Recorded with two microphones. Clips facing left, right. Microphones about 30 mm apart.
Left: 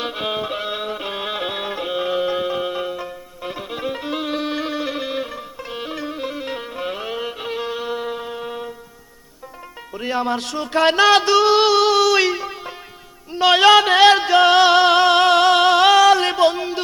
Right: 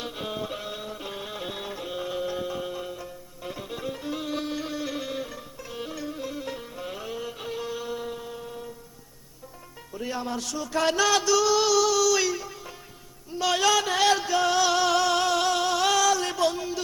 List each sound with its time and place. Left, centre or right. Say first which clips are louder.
0.0 s music: left 9 dB; left
9.9 s music: left 9 dB; left